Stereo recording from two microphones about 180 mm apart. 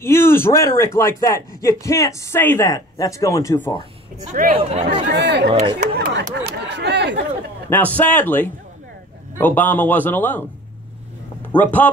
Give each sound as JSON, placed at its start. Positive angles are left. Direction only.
{"t": 0.0, "sound": "speech", "side_deg": 15}
{"t": 4.3, "sound": "speech", "side_deg": -50}
{"t": 5.0, "sound": "speech", "side_deg": -70}
{"t": 5.5, "sound": "speech", "side_deg": -35}
{"t": 5.9, "sound": "speech", "side_deg": -70}
{"t": 7.7, "sound": "speech", "side_deg": 10}
{"t": 11.5, "sound": "speech", "side_deg": 10}